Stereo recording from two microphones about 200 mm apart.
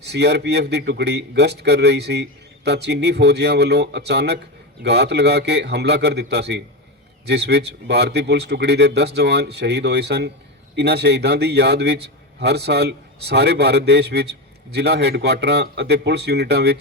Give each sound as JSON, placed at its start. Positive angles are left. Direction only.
{"t": 0.0, "sound": "a man's voice", "side_deg": -55}